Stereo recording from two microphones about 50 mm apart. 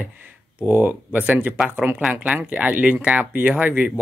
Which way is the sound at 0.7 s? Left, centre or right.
Right.